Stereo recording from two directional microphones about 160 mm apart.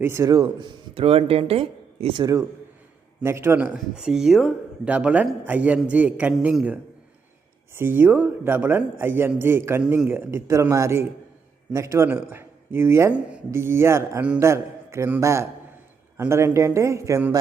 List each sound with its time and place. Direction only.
0.0 s speech: 20° right (ahead or behind); by 2.2 s 35° right (ahead or behind)
2.2 s a man's voice: 20° right (ahead or behind)
7.8 s speech: 10° right (ahead or behind)